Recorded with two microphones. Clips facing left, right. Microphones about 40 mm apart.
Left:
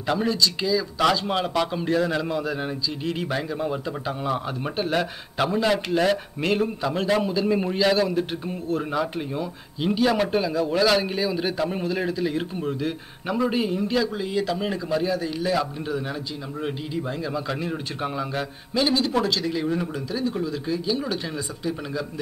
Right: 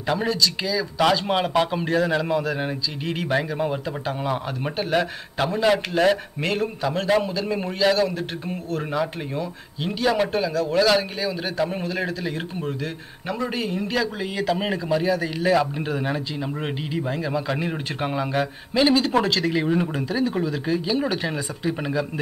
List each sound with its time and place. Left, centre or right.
0.0 s speech: centre
1.2 s a man's voice: right
3.3 s a man's voice: right
4.7 s a man's voice: centre
9.4 s a man's voice: centre
11.5 s a man's voice: centre
13.3 s a man's voice: centre
13.8 s a man's voice: centre
18.8 s a man's voice: right
19.1 s a man's voice: right